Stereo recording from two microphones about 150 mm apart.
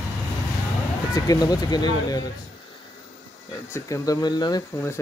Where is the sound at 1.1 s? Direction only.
25° left (ahead or behind).